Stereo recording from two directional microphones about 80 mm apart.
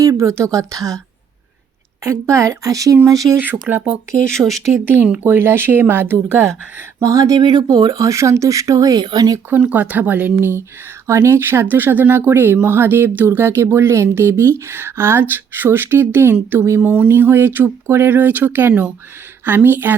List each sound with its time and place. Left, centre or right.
0.0 s a woman's voice: right
2.0 s speech: right
3.3 s speech: right
4.3 s speech: centre
5.2 s speech: right
7.0 s speech: right
7.3 s speech: right
7.9 s speech: right
9.5 s speech: centre
11.0 s speech: right